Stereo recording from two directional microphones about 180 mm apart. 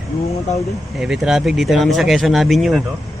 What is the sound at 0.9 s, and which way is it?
Speech, centre (ahead or behind).